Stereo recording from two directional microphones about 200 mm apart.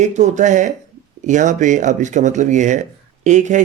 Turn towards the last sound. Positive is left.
turn(degrees=-35)  # may be behind; listen again after turning